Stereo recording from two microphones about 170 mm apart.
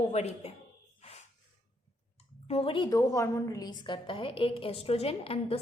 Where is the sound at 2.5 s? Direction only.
35° left (ahead or behind).